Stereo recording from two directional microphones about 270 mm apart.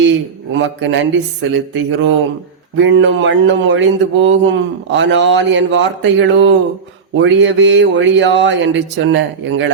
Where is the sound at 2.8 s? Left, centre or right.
Right.